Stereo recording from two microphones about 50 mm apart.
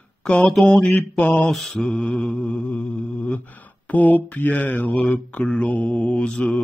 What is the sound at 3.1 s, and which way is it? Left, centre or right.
Mantra, left.